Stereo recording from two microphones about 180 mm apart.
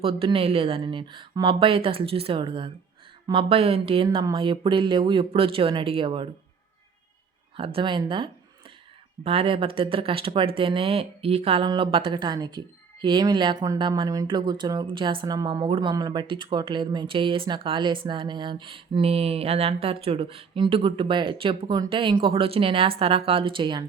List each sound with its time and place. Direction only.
0.0 s speech: 30° right (ahead or behind)
7.5 s speech: 30° right (ahead or behind)